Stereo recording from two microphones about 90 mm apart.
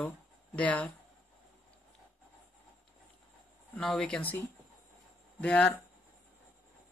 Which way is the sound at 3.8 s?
5° left (ahead or behind).